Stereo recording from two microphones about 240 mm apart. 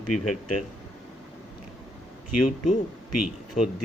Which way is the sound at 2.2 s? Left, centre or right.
Left.